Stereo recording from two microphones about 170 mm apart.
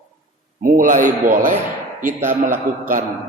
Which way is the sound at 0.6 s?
50° right (ahead or behind).